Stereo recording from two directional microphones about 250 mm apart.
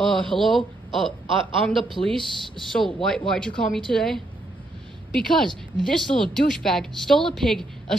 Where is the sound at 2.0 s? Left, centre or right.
Left.